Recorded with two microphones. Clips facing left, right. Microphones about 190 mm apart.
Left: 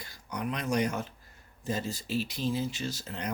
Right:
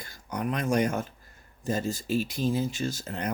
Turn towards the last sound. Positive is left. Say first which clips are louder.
# right 4 dB
turn(degrees=-50)  # may be behind; listen again after turning